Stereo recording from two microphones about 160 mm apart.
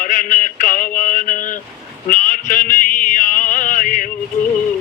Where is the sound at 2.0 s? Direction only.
55° left (ahead or behind).